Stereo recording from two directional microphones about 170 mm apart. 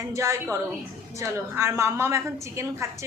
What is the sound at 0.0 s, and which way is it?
A woman's voice, 15° right (ahead or behind).